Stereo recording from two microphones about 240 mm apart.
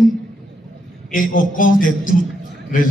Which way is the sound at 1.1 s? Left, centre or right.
Left.